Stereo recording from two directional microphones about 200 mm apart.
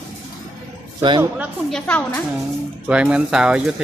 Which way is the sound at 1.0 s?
25° right (ahead or behind).